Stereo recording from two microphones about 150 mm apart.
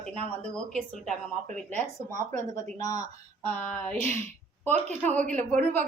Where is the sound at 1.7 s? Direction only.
50° right (ahead or behind).